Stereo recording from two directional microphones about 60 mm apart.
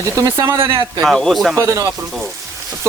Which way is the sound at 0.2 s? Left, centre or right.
Right.